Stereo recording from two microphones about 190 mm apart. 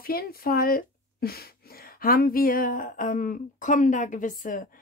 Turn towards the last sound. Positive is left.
turn(degrees=45)  # may be behind; listen again after turning